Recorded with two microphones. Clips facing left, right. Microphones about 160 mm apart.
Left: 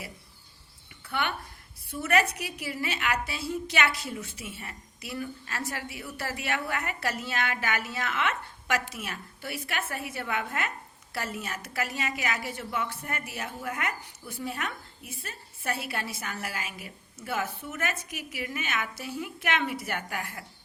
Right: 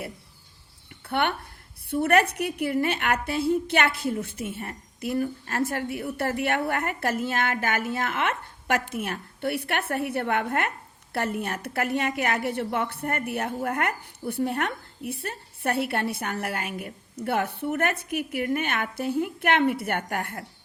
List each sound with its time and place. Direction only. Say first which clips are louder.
1.0 s a woman's voice: right 6 dB; 60° right (ahead or behind)